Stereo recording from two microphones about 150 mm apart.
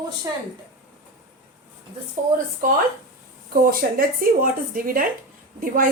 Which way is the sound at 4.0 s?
75° right (ahead or behind).